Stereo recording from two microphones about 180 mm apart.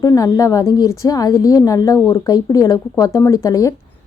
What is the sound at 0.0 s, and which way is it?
A woman's voice, 20° left (ahead or behind).